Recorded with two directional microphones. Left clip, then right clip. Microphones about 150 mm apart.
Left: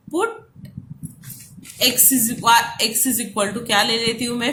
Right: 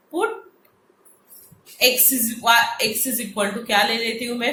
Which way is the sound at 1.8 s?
40° left (ahead or behind).